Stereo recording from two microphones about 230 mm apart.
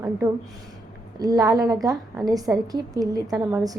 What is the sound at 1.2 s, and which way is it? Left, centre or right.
A woman's voice, centre.